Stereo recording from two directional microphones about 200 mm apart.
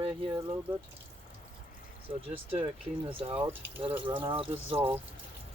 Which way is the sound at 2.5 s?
30° right (ahead or behind).